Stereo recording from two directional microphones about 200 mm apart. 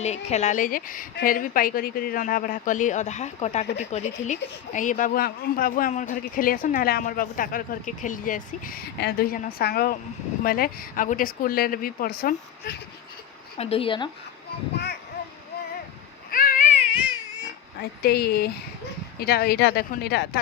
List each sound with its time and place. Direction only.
0.0 s a woman's voice: 35° left (ahead or behind); by 12.7 s 50° left (ahead or behind)
13.6 s speech: 30° left (ahead or behind)
16.3 s baby cry: 45° left (ahead or behind)
18.0 s a man's voice: 50° left (ahead or behind)